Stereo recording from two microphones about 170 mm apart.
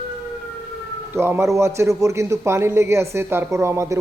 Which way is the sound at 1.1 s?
15° right (ahead or behind).